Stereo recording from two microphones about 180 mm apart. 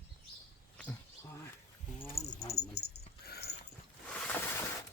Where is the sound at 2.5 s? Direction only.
60° left (ahead or behind).